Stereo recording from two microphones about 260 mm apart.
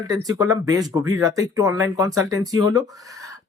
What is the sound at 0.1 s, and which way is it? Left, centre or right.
Speech, centre.